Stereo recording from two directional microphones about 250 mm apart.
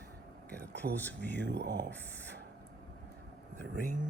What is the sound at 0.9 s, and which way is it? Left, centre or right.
Speech, centre.